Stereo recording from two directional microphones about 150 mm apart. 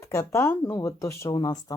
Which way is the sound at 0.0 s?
20° left (ahead or behind).